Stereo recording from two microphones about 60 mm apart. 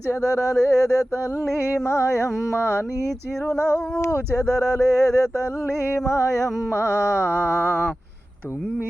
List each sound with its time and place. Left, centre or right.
0.1 s speech: left
1.8 s mantra: left
4.0 s speech: left
6.7 s mantra: left